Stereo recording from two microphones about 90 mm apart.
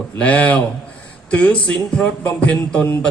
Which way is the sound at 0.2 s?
15° left (ahead or behind).